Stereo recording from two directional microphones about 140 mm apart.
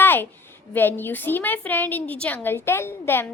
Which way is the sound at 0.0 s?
15° left (ahead or behind).